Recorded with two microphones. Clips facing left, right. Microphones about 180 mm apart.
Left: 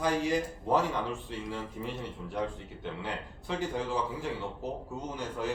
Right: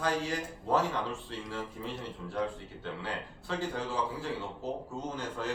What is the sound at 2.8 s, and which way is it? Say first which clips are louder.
A man's voice: left 1 dB; 15° left (ahead or behind).